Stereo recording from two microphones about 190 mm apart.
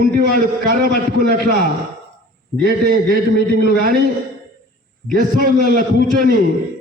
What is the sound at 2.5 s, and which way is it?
A man's voice, 50° right (ahead or behind).